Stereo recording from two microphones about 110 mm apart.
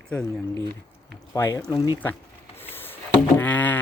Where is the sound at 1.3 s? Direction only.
30° left (ahead or behind).